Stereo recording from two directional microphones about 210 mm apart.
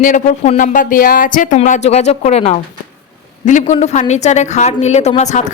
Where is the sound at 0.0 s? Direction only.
40° left (ahead or behind).